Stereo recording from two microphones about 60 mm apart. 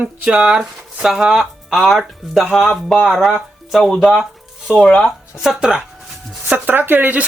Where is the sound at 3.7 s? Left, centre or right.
Centre.